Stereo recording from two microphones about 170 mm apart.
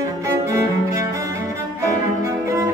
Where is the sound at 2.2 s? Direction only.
20° right (ahead or behind).